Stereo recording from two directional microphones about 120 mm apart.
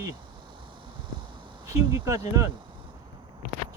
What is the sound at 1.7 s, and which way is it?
Speech, 25° right (ahead or behind).